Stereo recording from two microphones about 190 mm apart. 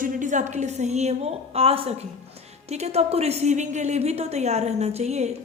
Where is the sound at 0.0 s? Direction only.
40° right (ahead or behind).